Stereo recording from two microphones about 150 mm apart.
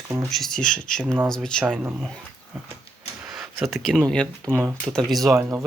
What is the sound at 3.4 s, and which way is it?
Speech, centre (ahead or behind).